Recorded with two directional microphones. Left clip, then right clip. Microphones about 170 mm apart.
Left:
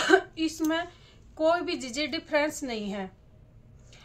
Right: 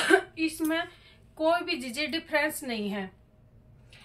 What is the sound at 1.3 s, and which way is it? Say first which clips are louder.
A woman's voice: left 1 dB; 50° left (ahead or behind).